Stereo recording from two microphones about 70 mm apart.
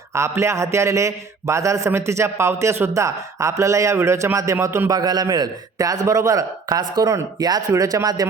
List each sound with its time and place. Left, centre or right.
0.1 s a man's voice: right
2.9 s a man's voice: right
4.9 s a man's voice: right
7.7 s a man's voice: right